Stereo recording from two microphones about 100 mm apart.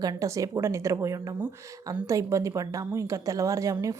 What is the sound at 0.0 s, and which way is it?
A woman's voice, 40° right (ahead or behind).